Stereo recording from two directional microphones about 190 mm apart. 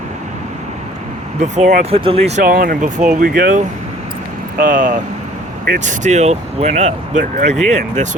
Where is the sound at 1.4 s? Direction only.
40° right (ahead or behind).